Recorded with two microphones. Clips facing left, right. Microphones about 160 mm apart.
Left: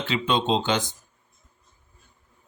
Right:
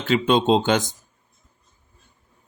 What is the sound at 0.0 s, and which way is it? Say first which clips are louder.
Speech: right 6 dB; 50° right (ahead or behind).